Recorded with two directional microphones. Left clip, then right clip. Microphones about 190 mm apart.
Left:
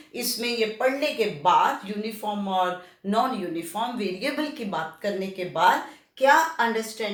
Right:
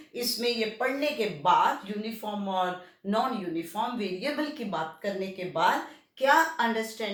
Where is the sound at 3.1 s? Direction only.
25° left (ahead or behind).